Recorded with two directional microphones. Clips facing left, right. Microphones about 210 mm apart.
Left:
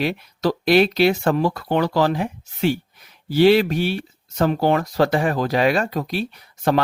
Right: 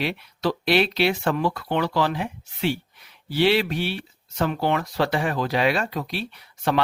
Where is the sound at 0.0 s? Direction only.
45° left (ahead or behind).